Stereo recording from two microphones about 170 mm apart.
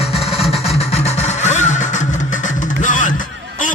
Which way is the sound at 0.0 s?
35° left (ahead or behind).